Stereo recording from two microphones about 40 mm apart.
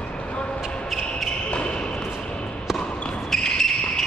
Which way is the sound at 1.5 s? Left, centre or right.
Left.